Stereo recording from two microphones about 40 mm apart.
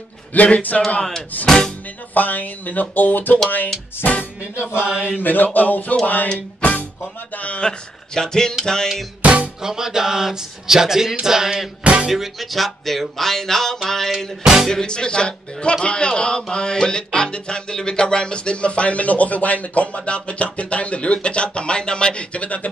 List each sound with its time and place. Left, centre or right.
0.3 s music: left
1.3 s speech: left
4.8 s a sound: right
5.2 s speech: left
6.3 s music: left
7.6 s speech: centre
9.2 s music: right
9.6 s speech: centre
11.8 s music: right
12.1 s music: centre
13.8 s speech: centre
14.1 s speech: centre
14.7 s speech: centre; by 22.7 s left